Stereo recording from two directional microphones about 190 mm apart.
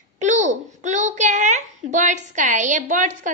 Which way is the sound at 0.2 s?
40° right (ahead or behind).